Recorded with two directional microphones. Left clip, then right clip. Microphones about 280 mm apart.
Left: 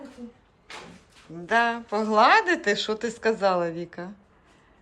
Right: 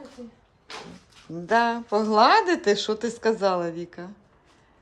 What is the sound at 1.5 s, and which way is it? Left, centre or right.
Speech, centre.